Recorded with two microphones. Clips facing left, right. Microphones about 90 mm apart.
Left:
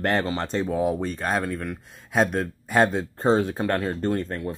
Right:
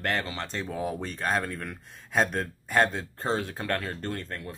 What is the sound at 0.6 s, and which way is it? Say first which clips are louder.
Speech: left 7 dB; 15° left (ahead or behind).